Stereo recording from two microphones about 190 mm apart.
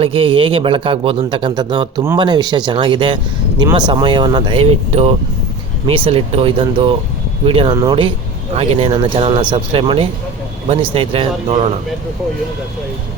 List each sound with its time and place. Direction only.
0.0 s speech: 30° right (ahead or behind)